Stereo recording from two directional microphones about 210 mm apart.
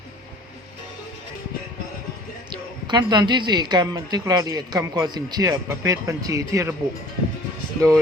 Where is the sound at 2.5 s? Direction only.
20° right (ahead or behind).